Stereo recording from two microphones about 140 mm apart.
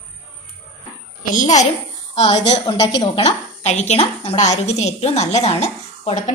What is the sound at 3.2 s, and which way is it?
A woman's voice, 50° left (ahead or behind).